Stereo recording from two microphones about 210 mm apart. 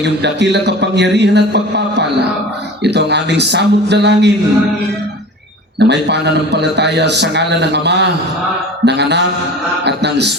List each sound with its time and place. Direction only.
0.0 s a man's voice: 55° right (ahead or behind)
5.8 s a man's voice: 55° right (ahead or behind)